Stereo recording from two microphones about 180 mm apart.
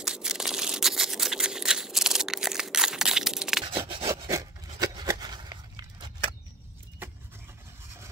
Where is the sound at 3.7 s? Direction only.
30° right (ahead or behind).